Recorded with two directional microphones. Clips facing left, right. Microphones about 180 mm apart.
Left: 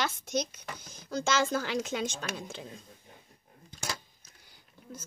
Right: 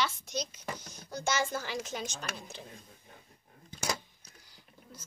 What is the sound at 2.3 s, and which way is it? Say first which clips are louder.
Speech: left 5 dB; 90° left.